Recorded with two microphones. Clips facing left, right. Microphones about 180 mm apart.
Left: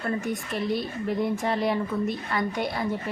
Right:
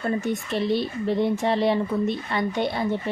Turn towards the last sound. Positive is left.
turn(degrees=-25)  # may be behind; listen again after turning